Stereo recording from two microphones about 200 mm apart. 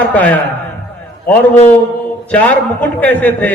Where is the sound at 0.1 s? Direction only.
10° left (ahead or behind).